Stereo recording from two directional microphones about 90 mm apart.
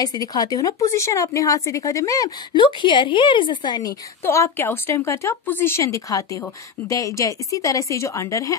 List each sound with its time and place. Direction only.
0.0 s a woman's voice: 45° left (ahead or behind)
2.6 s a woman's voice: 65° left (ahead or behind)
4.2 s a woman's voice: 30° left (ahead or behind)